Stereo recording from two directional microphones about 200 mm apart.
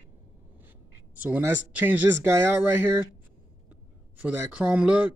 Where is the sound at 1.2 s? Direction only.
10° right (ahead or behind).